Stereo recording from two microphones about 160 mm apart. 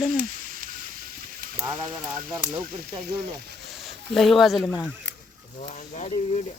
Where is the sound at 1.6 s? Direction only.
20° right (ahead or behind).